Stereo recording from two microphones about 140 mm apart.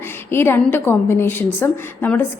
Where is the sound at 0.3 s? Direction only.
15° left (ahead or behind).